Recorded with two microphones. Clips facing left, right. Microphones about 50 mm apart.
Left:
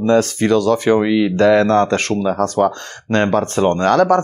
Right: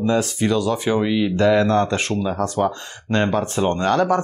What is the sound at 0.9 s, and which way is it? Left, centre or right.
Speech, left.